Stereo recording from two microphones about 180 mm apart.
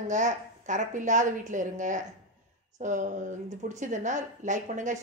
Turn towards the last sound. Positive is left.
turn(degrees=-45)  # may be behind; listen again after turning